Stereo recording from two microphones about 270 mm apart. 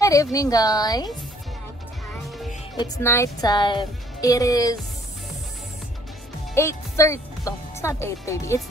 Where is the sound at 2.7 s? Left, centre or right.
Centre.